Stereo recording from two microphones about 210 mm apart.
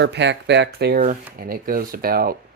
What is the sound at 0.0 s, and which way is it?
Speech, 55° right (ahead or behind).